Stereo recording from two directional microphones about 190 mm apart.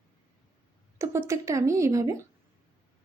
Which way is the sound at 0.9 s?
15° right (ahead or behind).